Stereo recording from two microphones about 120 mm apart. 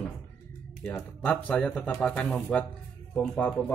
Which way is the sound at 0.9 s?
10° left (ahead or behind).